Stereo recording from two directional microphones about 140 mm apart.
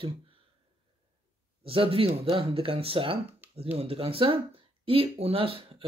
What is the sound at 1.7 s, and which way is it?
Speech, 40° right (ahead or behind).